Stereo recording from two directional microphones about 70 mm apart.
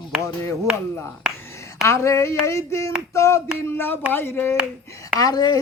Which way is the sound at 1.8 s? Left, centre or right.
Left.